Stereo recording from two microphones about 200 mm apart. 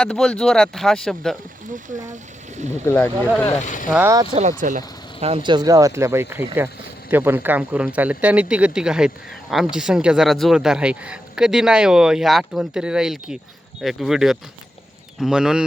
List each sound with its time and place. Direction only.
0.0 s speech: 5° left (ahead or behind)
2.8 s speech: 10° left (ahead or behind)
3.8 s speech: 5° right (ahead or behind)
4.1 s speech: 20° right (ahead or behind)
4.4 s speech: 40° right (ahead or behind)
5.2 s speech: 25° right (ahead or behind); by 15.6 s 5° right (ahead or behind)